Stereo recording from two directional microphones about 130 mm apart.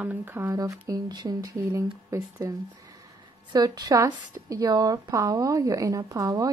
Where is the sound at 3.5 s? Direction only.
30° right (ahead or behind).